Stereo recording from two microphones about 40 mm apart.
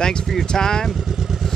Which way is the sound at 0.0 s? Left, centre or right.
Centre.